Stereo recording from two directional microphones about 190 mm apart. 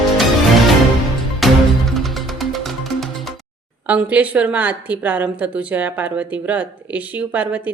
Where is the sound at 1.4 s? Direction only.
Centre (ahead or behind).